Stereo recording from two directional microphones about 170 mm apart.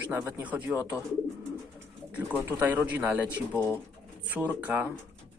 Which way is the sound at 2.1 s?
10° right (ahead or behind).